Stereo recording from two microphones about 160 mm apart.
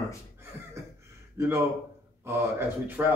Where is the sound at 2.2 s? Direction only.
15° right (ahead or behind).